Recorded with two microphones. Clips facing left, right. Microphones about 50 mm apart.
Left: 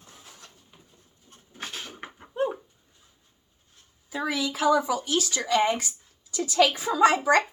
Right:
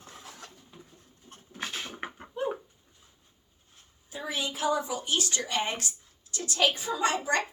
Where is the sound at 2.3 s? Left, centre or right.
Left.